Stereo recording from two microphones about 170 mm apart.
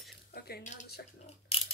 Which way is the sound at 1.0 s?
65° left (ahead or behind).